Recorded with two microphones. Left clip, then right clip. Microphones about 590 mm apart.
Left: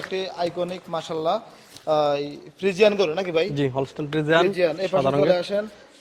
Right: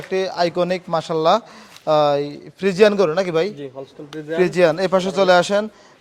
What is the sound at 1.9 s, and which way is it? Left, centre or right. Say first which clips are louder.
Speech: right 5 dB; right.